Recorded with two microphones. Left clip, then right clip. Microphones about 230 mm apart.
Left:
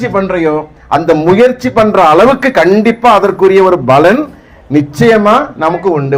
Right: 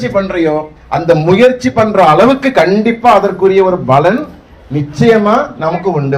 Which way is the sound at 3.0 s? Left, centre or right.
Left.